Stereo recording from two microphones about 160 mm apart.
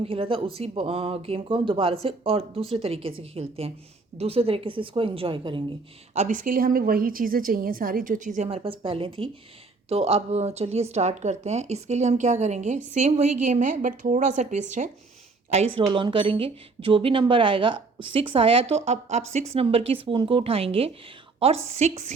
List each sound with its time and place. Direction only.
0.0 s speech: 35° right (ahead or behind)
6.1 s a woman's voice: 55° right (ahead or behind)
8.4 s speech: 35° right (ahead or behind)
15.5 s a woman's voice: 30° right (ahead or behind)